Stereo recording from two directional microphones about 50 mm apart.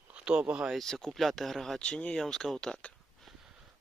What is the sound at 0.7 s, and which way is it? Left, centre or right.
Speech, centre.